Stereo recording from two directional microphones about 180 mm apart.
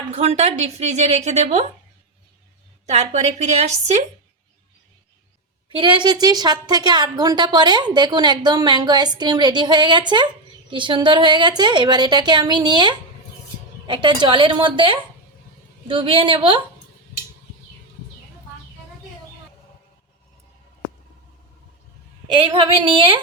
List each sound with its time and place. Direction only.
0.1 s speech: 35° right (ahead or behind)
2.8 s speech: 40° right (ahead or behind)
5.6 s a woman's voice: 30° right (ahead or behind)
22.3 s a woman's voice: 30° right (ahead or behind)